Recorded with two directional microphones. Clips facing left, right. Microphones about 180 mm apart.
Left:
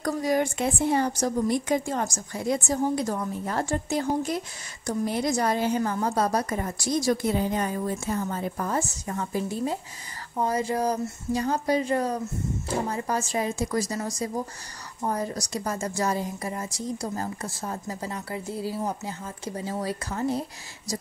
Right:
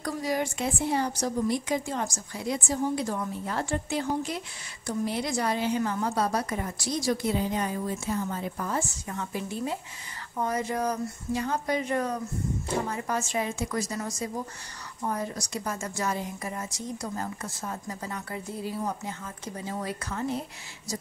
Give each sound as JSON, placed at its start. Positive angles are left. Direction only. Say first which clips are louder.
{"t": 0.0, "sound": "a woman's voice", "louder": "left 4 dB", "side_deg": 50}